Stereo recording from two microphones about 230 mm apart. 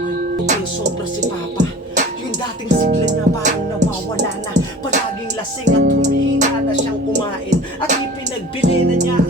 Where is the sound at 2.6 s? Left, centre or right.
Right.